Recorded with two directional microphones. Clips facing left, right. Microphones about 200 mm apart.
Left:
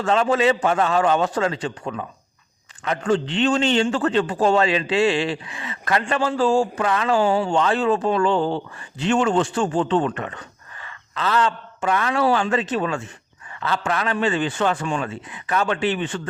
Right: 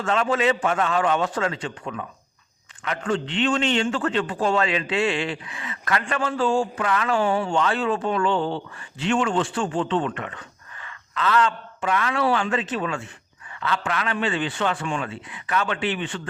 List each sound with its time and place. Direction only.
0.0 s a man's voice: 35° left (ahead or behind)